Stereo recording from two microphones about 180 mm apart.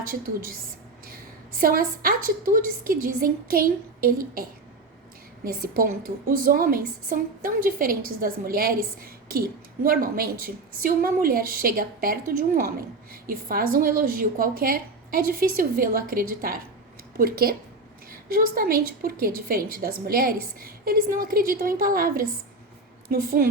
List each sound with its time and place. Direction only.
1.5 s a woman's voice: 55° right (ahead or behind)
5.5 s a woman's voice: 55° right (ahead or behind)
9.8 s a woman's voice: 55° right (ahead or behind)
13.2 s a woman's voice: 55° right (ahead or behind)